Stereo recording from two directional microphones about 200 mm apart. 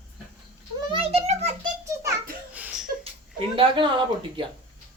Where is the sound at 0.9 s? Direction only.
30° right (ahead or behind).